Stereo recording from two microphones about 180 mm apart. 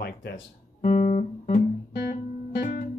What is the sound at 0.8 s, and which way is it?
Guitar, 40° left (ahead or behind).